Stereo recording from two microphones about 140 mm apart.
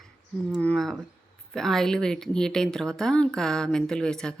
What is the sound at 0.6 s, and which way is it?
Speech, 5° left (ahead or behind).